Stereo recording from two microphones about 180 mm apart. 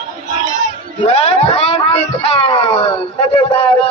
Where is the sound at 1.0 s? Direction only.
30° left (ahead or behind).